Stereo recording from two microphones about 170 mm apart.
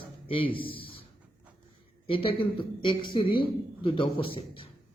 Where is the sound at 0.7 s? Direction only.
30° left (ahead or behind).